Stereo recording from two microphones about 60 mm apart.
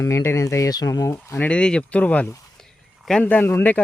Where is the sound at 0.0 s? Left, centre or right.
Left.